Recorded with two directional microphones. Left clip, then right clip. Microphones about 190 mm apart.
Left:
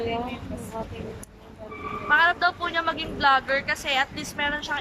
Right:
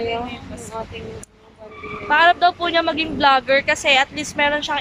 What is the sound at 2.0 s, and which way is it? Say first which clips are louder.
Speech: right 6 dB; 20° right (ahead or behind).